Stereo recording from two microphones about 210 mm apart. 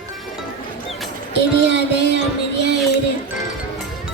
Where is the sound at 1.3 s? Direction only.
55° right (ahead or behind).